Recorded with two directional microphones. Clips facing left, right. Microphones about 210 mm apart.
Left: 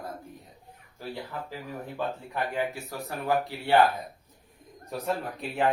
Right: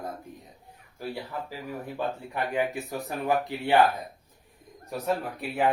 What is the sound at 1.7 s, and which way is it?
Speech, 15° right (ahead or behind).